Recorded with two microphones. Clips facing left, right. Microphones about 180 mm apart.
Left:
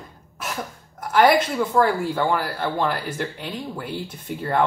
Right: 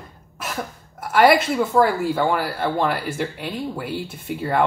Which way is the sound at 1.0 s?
5° right (ahead or behind).